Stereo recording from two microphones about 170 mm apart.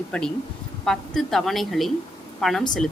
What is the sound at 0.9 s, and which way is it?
A woman's voice, centre (ahead or behind).